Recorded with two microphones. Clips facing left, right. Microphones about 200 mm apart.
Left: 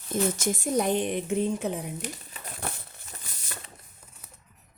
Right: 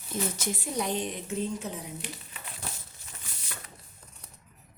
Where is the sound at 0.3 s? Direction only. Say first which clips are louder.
Left 6 dB; 45° left (ahead or behind).